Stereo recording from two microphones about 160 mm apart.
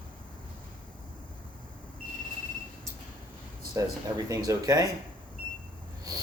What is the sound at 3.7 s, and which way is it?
Speech, 20° right (ahead or behind).